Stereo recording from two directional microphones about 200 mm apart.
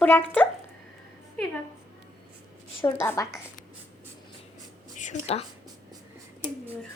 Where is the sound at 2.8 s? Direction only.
10° left (ahead or behind).